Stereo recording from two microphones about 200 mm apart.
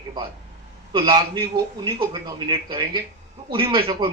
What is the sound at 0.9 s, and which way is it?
Speech, 25° right (ahead or behind).